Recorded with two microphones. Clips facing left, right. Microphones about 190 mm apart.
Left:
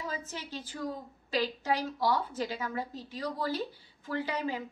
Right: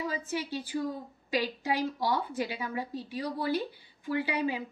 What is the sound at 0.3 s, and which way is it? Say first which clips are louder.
A woman's voice: right 8 dB; 10° right (ahead or behind).